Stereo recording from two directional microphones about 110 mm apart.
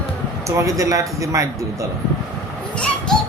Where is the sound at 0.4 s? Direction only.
30° right (ahead or behind).